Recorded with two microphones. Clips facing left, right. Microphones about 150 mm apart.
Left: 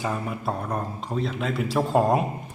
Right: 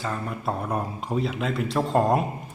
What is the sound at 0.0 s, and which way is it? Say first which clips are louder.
Mantra: left 2 dB; 10° left (ahead or behind).